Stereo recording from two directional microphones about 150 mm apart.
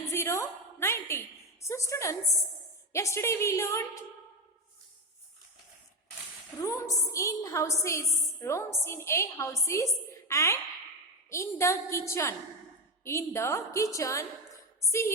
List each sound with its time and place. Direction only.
0.1 s a sound: 20° left (ahead or behind)
1.6 s a woman's voice: 20° left (ahead or behind)
6.6 s a woman's voice: 20° left (ahead or behind)